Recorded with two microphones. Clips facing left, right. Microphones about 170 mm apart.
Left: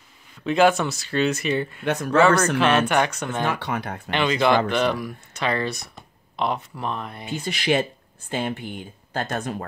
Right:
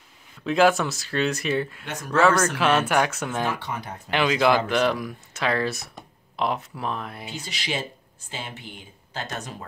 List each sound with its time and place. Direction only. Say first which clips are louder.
0.4 s speech: left 1 dB; centre (ahead or behind)
3.4 s speech: left 3 dB; 65° left (ahead or behind)
4.1 s speech: left 1 dB; 5° right (ahead or behind)
7.2 s speech: left 14 dB; 55° left (ahead or behind)